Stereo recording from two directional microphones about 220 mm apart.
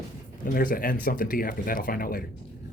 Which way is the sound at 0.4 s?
40° left (ahead or behind).